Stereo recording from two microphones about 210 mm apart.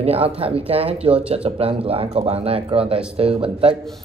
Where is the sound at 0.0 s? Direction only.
30° right (ahead or behind).